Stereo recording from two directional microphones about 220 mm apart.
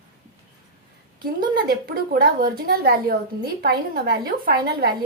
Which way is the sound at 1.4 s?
40° right (ahead or behind).